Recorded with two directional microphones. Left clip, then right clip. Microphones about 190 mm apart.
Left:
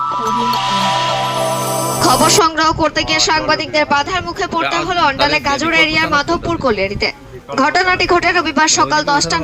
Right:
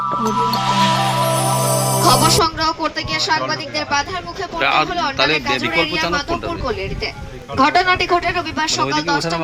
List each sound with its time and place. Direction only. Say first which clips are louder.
2.0 s speech: left 3 dB; 40° left (ahead or behind)
4.6 s speech: right 5 dB; 10° left (ahead or behind)
4.9 s speech: left 4 dB; 40° left (ahead or behind)